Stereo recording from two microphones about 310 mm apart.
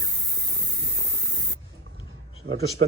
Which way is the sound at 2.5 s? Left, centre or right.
Right.